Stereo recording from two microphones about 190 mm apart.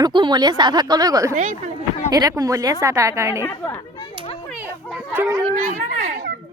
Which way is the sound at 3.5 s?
20° left (ahead or behind).